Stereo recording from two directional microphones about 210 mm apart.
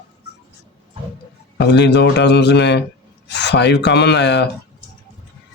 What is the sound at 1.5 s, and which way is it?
A man's voice, 55° left (ahead or behind).